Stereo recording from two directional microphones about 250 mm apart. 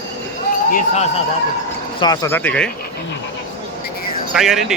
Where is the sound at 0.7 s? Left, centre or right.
Left.